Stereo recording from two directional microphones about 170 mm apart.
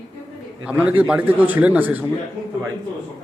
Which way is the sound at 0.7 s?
10° right (ahead or behind).